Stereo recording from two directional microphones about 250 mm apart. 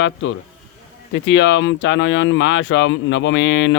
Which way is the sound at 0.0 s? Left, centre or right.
Left.